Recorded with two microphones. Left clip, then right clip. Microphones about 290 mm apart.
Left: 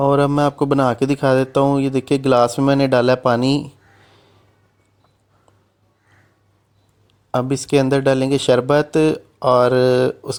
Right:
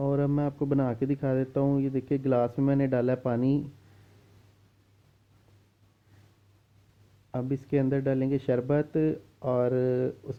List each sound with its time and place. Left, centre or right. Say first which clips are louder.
0.0 s speech: left 13 dB; centre
7.3 s speech: left 12 dB; left